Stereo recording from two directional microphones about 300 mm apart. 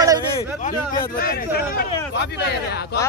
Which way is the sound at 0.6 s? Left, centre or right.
Left.